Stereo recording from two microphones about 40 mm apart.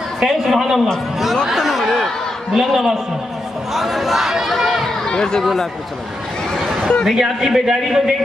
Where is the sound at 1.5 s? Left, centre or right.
Centre.